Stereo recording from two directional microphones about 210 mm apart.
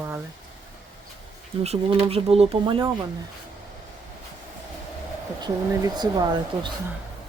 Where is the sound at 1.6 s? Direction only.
30° right (ahead or behind).